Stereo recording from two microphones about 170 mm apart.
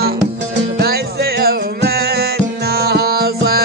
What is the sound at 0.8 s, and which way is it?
Music, 65° right (ahead or behind).